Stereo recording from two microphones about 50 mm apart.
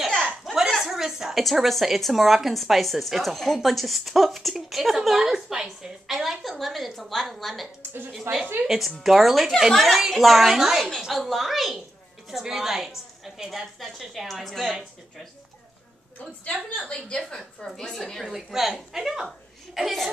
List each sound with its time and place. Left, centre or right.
0.7 s a woman's voice: centre
16.4 s a woman's voice: left; by 18.0 s centre
18.2 s a woman's voice: centre